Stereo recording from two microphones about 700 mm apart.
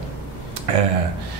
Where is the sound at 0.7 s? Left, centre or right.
Right.